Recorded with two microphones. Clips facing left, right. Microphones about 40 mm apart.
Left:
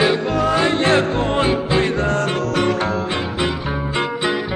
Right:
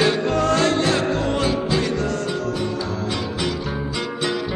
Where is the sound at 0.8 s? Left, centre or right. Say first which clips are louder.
Left 4 dB; left.